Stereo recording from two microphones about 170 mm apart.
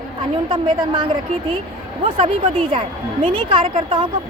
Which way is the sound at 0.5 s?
30° right (ahead or behind).